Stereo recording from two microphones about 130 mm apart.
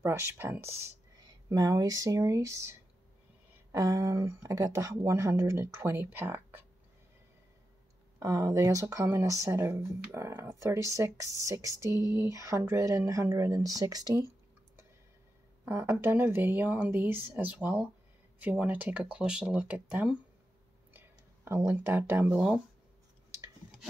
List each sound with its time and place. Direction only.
0.0 s speech: 20° right (ahead or behind)
3.7 s speech: 25° right (ahead or behind)
8.2 s speech: 25° right (ahead or behind)
15.6 s speech: 20° right (ahead or behind)